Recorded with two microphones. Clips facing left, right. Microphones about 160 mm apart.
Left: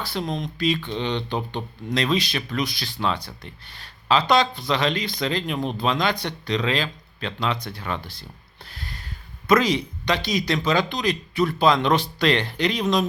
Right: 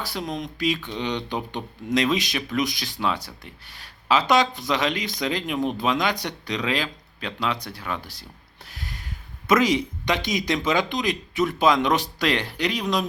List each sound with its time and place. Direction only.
0.1 s speech: 10° right (ahead or behind)